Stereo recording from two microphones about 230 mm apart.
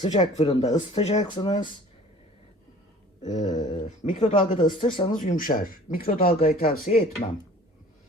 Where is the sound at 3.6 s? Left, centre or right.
Left.